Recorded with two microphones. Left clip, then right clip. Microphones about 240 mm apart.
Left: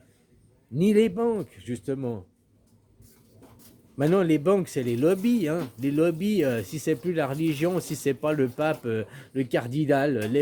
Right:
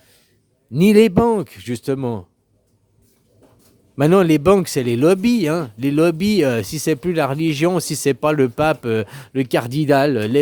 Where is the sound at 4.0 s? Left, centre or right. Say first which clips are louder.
Right 8 dB; right.